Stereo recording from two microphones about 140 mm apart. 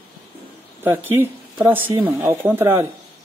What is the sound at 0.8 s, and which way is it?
Speech, 15° right (ahead or behind).